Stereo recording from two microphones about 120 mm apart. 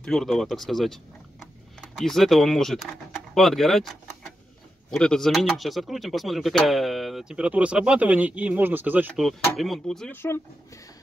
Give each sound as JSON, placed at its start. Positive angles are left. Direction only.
{"t": 0.0, "sound": "speech", "side_deg": 5}
{"t": 9.1, "sound": "speech", "side_deg": 0}
{"t": 10.1, "sound": "speech", "side_deg": 20}